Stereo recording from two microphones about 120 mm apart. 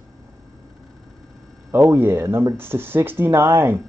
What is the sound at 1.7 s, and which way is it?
Speech, 20° right (ahead or behind).